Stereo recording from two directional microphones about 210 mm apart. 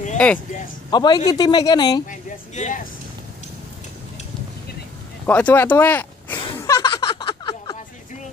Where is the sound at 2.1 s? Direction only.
35° left (ahead or behind).